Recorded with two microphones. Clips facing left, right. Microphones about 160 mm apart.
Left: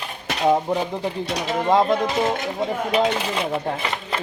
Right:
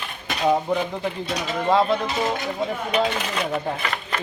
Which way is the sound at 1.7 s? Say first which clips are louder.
Left 1 dB; 15° left (ahead or behind).